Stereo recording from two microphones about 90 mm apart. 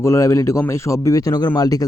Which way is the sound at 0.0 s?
35° left (ahead or behind).